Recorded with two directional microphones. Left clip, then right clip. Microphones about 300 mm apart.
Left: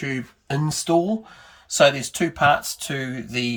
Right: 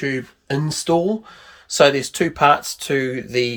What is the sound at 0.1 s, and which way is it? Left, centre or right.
Speech, centre.